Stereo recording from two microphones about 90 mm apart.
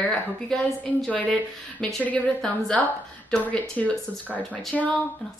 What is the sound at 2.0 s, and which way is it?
Speech, 15° left (ahead or behind).